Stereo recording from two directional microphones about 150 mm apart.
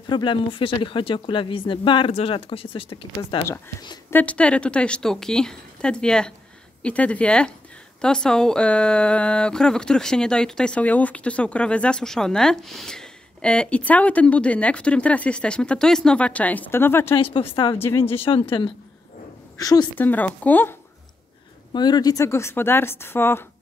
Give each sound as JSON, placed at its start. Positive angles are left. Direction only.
{"t": 0.0, "sound": "speech", "side_deg": 30}
{"t": 4.1, "sound": "speech", "side_deg": 10}
{"t": 17.1, "sound": "speech", "side_deg": 35}
{"t": 17.7, "sound": "speech", "side_deg": 15}
{"t": 18.1, "sound": "speech", "side_deg": 40}
{"t": 19.5, "sound": "a woman's voice", "side_deg": 25}
{"t": 20.0, "sound": "speech", "side_deg": 10}
{"t": 21.7, "sound": "speech", "side_deg": 30}